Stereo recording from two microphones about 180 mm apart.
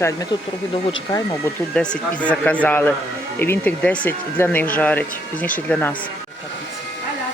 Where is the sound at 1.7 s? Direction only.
5° left (ahead or behind).